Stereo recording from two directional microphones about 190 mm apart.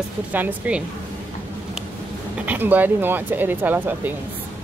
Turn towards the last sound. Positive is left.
turn(degrees=-10)  # may be behind; listen again after turning